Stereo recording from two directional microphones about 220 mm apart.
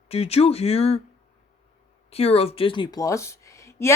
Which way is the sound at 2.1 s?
25° left (ahead or behind).